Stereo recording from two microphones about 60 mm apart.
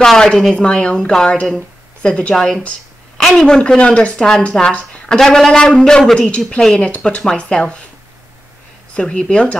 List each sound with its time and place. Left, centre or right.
0.0 s speech: centre
2.3 s speech: centre
8.9 s speech: centre